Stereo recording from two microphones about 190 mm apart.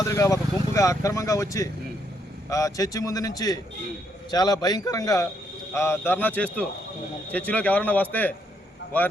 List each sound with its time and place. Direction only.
0.0 s a man's voice: 15° left (ahead or behind)